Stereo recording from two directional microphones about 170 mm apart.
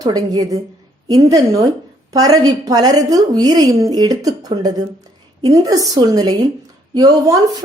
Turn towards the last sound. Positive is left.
turn(degrees=-20)  # may be behind; listen again after turning